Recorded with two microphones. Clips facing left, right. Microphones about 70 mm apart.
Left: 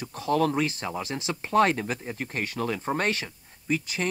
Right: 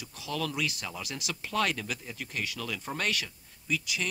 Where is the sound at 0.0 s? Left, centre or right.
Left.